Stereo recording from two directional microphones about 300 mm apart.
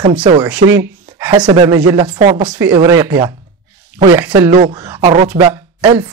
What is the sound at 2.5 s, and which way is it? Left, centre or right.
A man's voice, centre.